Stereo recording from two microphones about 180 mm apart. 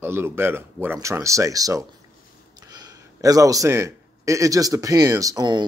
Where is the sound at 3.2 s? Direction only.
20° right (ahead or behind).